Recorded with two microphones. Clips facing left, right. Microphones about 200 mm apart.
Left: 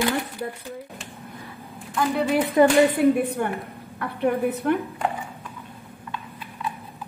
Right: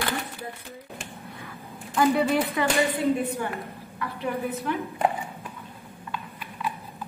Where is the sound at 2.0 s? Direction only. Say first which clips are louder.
Right 2 dB; centre (ahead or behind).